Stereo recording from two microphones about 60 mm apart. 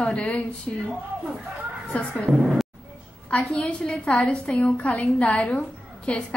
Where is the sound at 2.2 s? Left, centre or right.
Centre.